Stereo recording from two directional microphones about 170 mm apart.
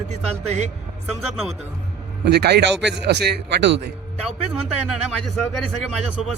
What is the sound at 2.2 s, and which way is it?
A man's voice, 70° right (ahead or behind).